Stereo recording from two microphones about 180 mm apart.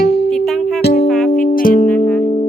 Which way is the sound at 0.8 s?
60° left (ahead or behind).